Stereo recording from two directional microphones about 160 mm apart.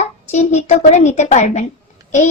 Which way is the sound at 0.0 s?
45° left (ahead or behind).